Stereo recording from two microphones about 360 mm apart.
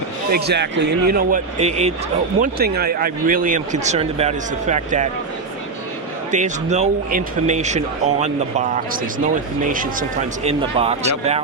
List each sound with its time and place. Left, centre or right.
0.3 s speech: right
6.3 s speech: centre